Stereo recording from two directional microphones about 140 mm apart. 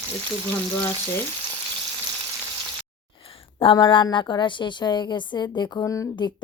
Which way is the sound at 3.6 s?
35° left (ahead or behind).